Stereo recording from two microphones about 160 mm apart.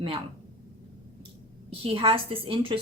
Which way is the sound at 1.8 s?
35° right (ahead or behind).